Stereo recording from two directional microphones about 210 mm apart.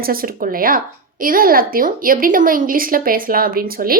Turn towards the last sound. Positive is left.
turn(degrees=-45)  # may be behind; listen again after turning